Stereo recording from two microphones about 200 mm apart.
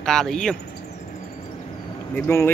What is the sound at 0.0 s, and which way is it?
Speech, 5° left (ahead or behind).